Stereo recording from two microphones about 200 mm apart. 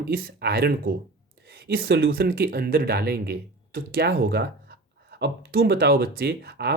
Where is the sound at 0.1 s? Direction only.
50° right (ahead or behind).